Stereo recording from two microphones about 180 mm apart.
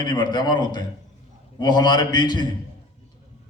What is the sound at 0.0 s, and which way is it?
A man's voice, 25° left (ahead or behind).